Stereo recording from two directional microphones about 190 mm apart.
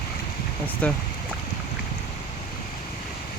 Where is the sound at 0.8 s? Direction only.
5° left (ahead or behind).